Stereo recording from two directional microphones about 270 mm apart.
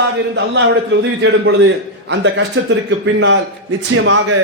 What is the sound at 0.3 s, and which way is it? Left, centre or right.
A man's voice, right.